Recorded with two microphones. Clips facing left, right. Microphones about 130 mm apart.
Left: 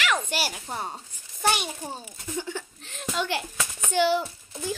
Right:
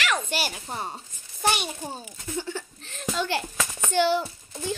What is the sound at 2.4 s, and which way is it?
Chuckle, 15° left (ahead or behind).